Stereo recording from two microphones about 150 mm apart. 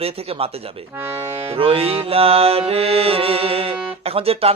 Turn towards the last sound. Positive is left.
turn(degrees=-40)  # may be behind; listen again after turning